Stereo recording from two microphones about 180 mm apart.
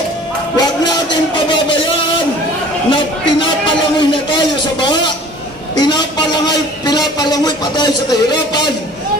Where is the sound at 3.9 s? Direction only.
25° left (ahead or behind).